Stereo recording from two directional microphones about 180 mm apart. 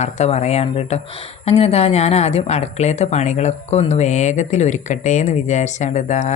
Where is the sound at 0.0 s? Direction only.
35° left (ahead or behind).